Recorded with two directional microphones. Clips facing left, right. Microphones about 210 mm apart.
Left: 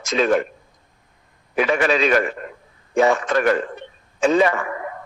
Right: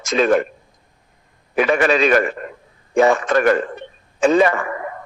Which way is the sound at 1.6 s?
50° right (ahead or behind).